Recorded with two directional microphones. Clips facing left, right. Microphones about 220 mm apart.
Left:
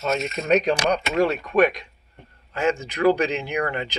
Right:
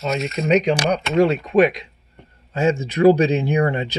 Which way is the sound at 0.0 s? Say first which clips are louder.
Right 2 dB; 15° right (ahead or behind).